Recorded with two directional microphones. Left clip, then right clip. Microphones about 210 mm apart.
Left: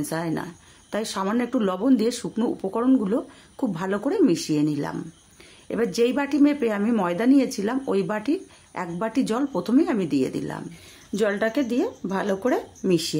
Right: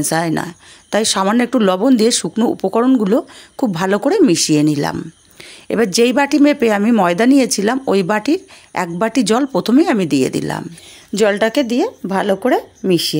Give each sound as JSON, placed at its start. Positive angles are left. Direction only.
{"t": 0.0, "sound": "speech", "side_deg": -35}